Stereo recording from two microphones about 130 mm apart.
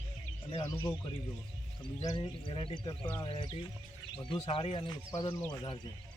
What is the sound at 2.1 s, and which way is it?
Speech, 40° left (ahead or behind).